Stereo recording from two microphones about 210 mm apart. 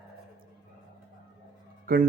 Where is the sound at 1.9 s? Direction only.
45° right (ahead or behind).